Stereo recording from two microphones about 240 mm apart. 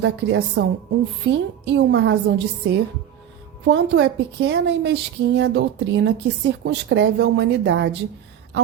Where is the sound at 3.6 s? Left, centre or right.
Right.